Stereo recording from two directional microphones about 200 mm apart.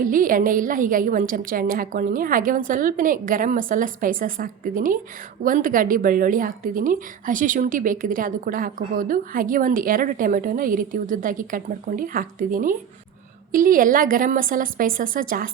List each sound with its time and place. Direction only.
0.0 s a woman's voice: 45° right (ahead or behind)